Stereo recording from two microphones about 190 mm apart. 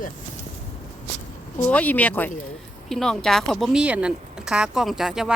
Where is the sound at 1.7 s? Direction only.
10° left (ahead or behind).